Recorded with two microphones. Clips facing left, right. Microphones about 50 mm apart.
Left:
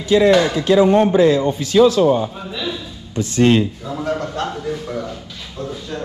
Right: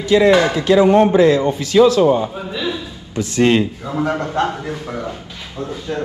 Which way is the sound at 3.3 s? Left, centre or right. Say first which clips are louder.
Even; right.